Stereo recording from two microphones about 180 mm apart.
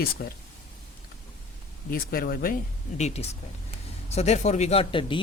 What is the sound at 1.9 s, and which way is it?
Speech, 55° left (ahead or behind).